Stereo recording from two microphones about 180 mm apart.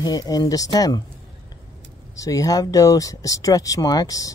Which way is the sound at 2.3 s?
20° left (ahead or behind).